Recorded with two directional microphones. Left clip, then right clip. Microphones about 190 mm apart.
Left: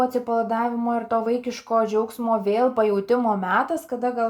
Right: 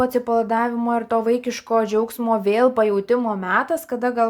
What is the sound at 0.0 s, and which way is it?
Speech, 20° right (ahead or behind).